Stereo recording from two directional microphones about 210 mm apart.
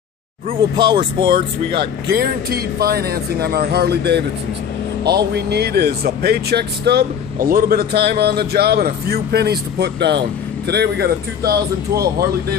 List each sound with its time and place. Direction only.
0.5 s speech: 20° right (ahead or behind)
1.3 s speech: 50° right (ahead or behind)